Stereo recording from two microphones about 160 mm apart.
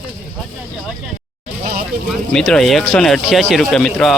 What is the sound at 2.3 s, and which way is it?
Speech, 5° left (ahead or behind).